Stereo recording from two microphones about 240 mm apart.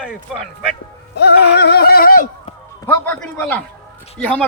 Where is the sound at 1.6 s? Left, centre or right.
Left.